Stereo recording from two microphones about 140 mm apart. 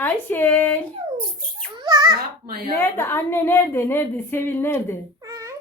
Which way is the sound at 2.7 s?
15° left (ahead or behind).